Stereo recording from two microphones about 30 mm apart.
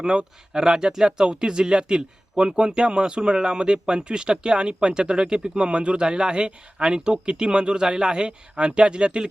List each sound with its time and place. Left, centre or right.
0.0 s speech: right